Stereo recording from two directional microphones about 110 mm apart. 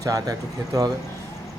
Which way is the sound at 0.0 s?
30° right (ahead or behind).